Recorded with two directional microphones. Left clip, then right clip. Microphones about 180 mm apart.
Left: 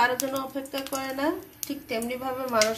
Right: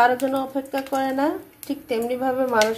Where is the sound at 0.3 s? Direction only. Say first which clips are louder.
Right 6 dB; 45° right (ahead or behind).